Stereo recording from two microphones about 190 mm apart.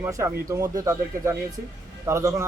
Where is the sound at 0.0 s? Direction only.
15° right (ahead or behind).